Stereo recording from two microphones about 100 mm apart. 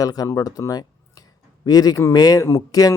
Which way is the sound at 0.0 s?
40° left (ahead or behind).